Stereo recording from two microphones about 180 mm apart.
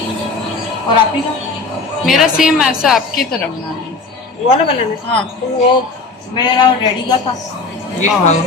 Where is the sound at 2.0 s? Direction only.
5° right (ahead or behind).